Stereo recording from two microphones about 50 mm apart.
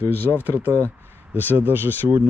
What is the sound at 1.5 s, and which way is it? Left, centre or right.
Speech, right.